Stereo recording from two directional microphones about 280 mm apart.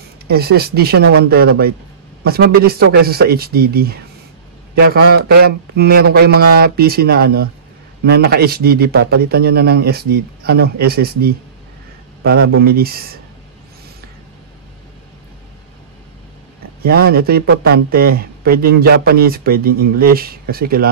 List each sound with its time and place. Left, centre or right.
0.3 s a man's voice: right
16.8 s a man's voice: right